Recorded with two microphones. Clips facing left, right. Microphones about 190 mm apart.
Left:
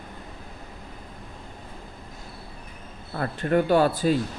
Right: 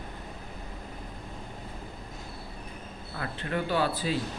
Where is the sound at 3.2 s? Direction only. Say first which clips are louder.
Left 9 dB; 50° left (ahead or behind).